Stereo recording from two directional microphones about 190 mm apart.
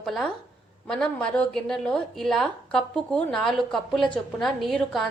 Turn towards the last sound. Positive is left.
turn(degrees=0)  # may be behind; listen again after turning